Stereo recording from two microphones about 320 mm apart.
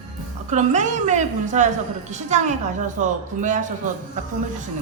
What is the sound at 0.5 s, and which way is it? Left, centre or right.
A woman's voice, right.